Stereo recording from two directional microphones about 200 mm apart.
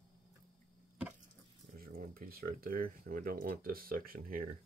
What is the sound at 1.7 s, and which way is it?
Speech, 45° right (ahead or behind).